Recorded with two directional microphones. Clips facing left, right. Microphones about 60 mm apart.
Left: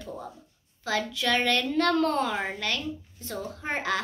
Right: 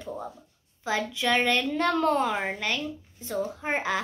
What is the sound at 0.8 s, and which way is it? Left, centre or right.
A woman's voice, centre.